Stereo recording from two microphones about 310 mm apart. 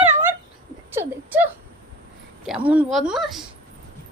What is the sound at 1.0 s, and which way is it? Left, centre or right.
Speech, centre.